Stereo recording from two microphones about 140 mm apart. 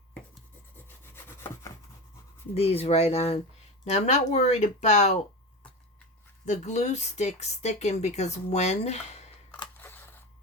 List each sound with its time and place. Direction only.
1.1 s wood: 15° left (ahead or behind)
2.6 s speech: 45° left (ahead or behind)
6.4 s speech: 55° left (ahead or behind)
9.7 s a sound: 15° left (ahead or behind)